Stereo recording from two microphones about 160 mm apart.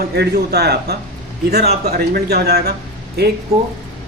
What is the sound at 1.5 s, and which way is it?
A man's voice, 80° right.